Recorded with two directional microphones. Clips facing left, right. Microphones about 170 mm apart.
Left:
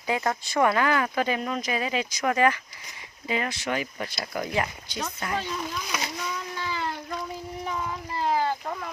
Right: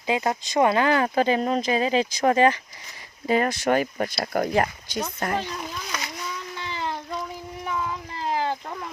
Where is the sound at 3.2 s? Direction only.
45° right (ahead or behind).